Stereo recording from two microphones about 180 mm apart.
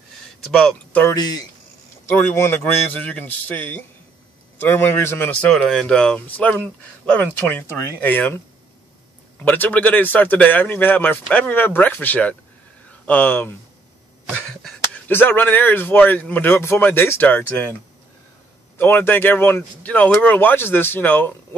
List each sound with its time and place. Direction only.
0.5 s speech: 5° left (ahead or behind)
1.1 s speech: 20° left (ahead or behind)
9.4 s speech: 10° left (ahead or behind)
18.8 s speech: 10° left (ahead or behind)